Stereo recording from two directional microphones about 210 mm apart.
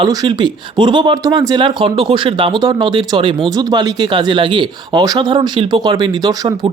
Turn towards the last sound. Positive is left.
turn(degrees=-20)  # may be behind; listen again after turning